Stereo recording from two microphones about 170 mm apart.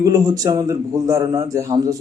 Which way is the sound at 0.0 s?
20° right (ahead or behind).